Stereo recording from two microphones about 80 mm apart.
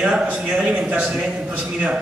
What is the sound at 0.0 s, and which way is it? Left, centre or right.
A man's voice, centre.